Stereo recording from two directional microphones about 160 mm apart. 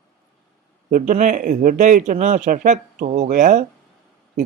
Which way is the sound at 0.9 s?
55° right (ahead or behind).